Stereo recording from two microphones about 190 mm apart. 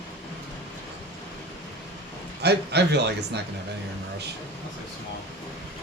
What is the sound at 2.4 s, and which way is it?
Speech, 60° right (ahead or behind).